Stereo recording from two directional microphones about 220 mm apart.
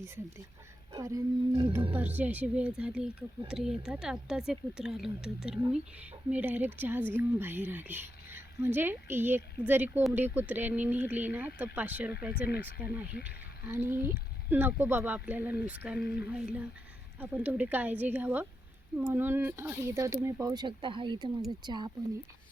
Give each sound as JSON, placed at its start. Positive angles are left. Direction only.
{"t": 0.9, "sound": "a woman's voice", "side_deg": -15}
{"t": 1.9, "sound": "a woman's voice", "side_deg": -10}
{"t": 12.3, "sound": "speech", "side_deg": 40}
{"t": 13.2, "sound": "a woman's voice", "side_deg": -10}